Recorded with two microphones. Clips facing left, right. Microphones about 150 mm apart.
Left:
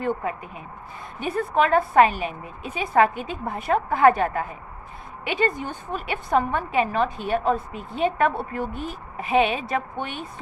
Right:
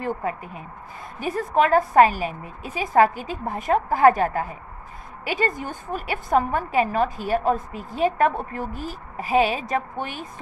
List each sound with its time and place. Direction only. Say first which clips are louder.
0.0 s a woman's voice: left 1 dB; 35° right (ahead or behind)